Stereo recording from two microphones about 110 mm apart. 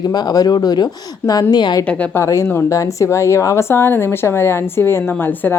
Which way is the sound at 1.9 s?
10° left (ahead or behind).